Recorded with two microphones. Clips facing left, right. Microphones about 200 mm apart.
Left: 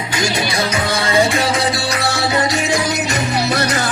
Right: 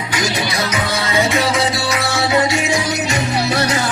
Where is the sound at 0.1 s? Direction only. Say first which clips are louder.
Left 1 dB; 30° left (ahead or behind).